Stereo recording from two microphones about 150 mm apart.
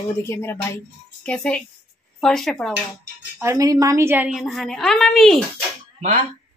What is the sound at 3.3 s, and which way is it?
Speech, 20° right (ahead or behind).